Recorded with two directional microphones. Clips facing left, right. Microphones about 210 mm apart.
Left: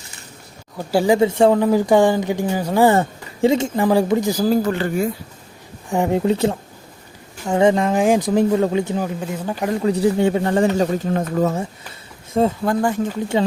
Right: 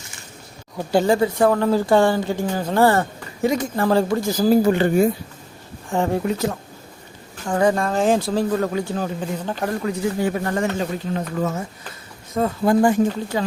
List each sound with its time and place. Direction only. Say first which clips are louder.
0.8 s speech: left 2 dB; 5° left (ahead or behind); by 3.7 s 25° left (ahead or behind)
3.8 s speech: left 2 dB; 15° left (ahead or behind)
4.4 s speech: right 4 dB; 5° right (ahead or behind)
4.7 s speech: right 4 dB; 20° right (ahead or behind)
5.9 s speech: left 2 dB; 15° left (ahead or behind)
6.2 s speech: left 5 dB; 30° left (ahead or behind)
9.0 s speech: left 1 dB; 10° left (ahead or behind)
9.8 s speech: left 7 dB; 30° left (ahead or behind)
10.8 s speech: left 5 dB; 45° left (ahead or behind)
12.6 s speech: right 3 dB; 15° right (ahead or behind)
13.3 s speech: left 8 dB; 20° left (ahead or behind)